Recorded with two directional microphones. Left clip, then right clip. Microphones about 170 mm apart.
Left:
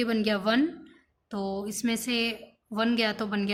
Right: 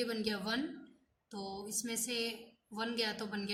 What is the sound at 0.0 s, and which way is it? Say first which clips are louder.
A woman's voice: left 10 dB; 40° left (ahead or behind).